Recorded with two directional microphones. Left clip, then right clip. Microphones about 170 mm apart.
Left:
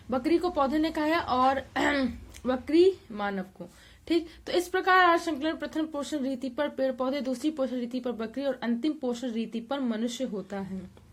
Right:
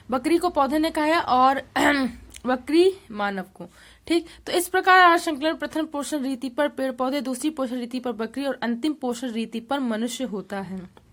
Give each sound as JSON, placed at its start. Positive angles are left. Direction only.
{"t": 0.1, "sound": "a woman's voice", "side_deg": -25}